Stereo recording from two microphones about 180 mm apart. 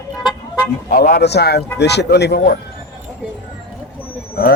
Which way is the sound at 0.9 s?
55° left (ahead or behind).